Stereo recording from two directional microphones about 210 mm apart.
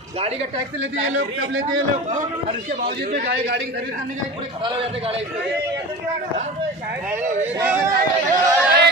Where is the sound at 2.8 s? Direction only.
45° right (ahead or behind).